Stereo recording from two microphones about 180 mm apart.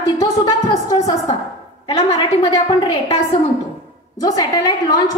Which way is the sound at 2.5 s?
30° left (ahead or behind).